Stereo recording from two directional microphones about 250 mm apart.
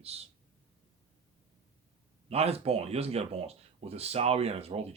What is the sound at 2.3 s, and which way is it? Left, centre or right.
Speech, right.